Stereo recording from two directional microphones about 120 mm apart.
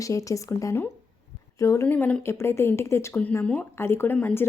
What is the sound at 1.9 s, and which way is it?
Speech, 15° left (ahead or behind).